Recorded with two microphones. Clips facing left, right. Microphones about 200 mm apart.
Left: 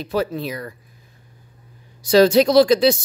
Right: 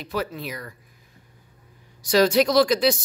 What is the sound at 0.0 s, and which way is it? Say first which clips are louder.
Speech: left 6 dB; 30° left (ahead or behind).